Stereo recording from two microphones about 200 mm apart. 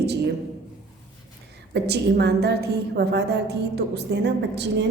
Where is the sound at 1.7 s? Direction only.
55° right (ahead or behind).